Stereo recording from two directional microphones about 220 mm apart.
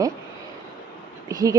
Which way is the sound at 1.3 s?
15° right (ahead or behind).